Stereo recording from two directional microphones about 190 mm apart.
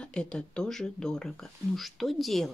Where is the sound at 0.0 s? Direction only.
5° left (ahead or behind).